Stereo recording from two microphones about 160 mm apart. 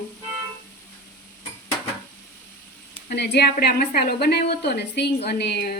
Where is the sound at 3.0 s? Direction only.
90° left.